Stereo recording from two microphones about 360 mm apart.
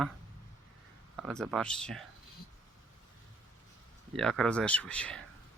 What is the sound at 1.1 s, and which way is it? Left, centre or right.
Speech, centre.